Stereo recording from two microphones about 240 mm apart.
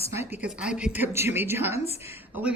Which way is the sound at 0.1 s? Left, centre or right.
Centre.